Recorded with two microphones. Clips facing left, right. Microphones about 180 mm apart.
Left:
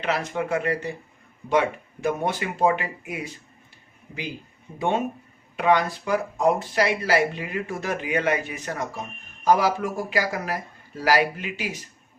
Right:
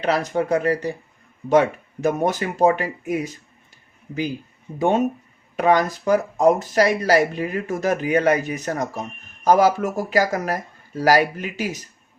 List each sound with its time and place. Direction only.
0.0 s speech: 35° right (ahead or behind)
4.8 s speech: 40° right (ahead or behind)